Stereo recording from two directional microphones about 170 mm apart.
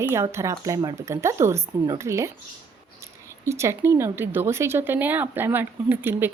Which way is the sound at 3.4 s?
15° right (ahead or behind).